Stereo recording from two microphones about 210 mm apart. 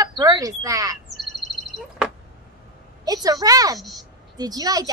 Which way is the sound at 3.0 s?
15° right (ahead or behind).